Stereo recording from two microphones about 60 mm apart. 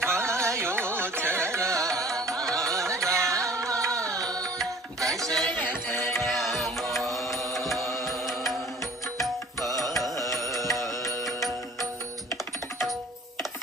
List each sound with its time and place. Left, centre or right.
0.0 s carnatic music: right
1.9 s music: centre
2.3 s carnatic music: centre
2.6 s carnatic music: right
3.2 s music: right
5.1 s a sound: centre
6.0 s music: centre